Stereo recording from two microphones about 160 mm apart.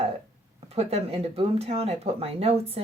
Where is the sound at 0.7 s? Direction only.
40° right (ahead or behind).